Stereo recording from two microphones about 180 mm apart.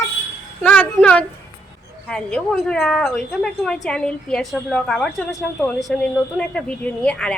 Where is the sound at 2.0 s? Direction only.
5° left (ahead or behind).